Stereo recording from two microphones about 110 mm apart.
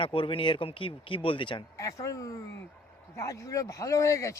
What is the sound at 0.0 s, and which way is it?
A man's voice, 50° left (ahead or behind).